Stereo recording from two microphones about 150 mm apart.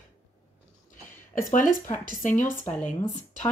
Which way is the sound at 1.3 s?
65° left (ahead or behind).